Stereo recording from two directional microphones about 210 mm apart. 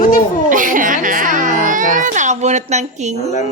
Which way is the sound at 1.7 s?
40° right (ahead or behind).